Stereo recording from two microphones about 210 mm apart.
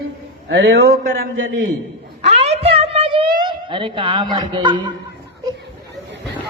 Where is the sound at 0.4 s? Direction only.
65° right (ahead or behind).